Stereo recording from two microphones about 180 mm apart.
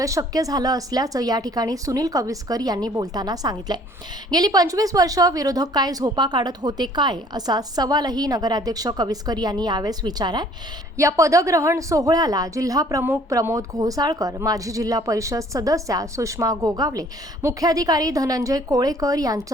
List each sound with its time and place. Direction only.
0.0 s a woman's voice: 20° right (ahead or behind)